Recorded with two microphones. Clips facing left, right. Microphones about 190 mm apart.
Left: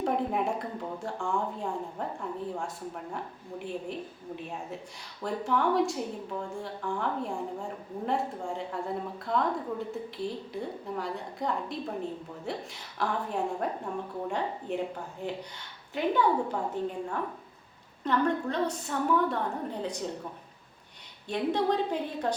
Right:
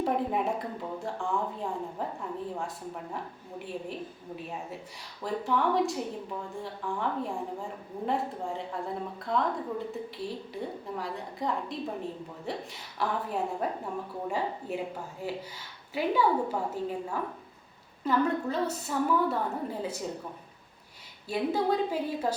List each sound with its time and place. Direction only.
0.0 s a woman's voice: centre (ahead or behind)
5.2 s a woman's voice: centre (ahead or behind)
21.2 s a woman's voice: 5° right (ahead or behind)